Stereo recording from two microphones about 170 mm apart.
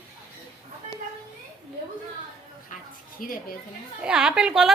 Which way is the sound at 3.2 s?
55° left (ahead or behind).